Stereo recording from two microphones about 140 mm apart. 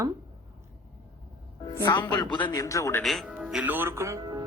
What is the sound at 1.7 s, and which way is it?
A man's voice, 30° left (ahead or behind).